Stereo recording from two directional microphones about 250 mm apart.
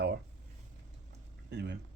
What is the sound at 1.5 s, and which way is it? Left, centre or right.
Speech, right.